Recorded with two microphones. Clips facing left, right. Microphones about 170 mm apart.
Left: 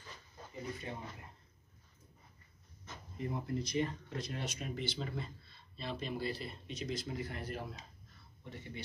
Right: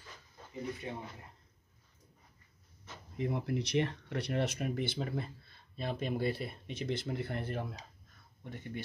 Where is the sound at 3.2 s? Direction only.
75° right (ahead or behind).